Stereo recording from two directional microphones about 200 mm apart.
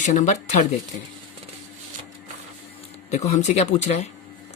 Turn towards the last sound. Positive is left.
turn(degrees=35)  # may be behind; listen again after turning